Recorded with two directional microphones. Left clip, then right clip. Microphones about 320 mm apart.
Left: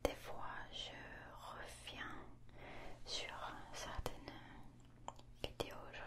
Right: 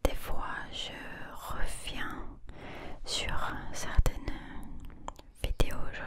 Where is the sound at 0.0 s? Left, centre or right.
Right.